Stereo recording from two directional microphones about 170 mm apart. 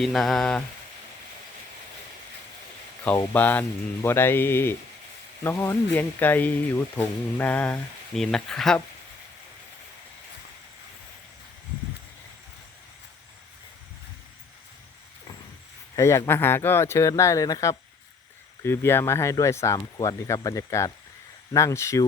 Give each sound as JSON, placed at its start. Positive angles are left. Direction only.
{"t": 0.0, "sound": "mantra", "side_deg": 0}
{"t": 3.3, "sound": "speech", "side_deg": 10}
{"t": 16.0, "sound": "speech", "side_deg": 15}